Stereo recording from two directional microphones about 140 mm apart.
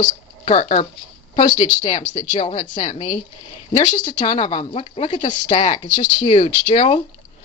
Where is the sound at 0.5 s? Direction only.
50° left (ahead or behind).